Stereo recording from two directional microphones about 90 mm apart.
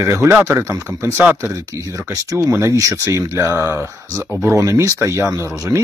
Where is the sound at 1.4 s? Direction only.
35° right (ahead or behind).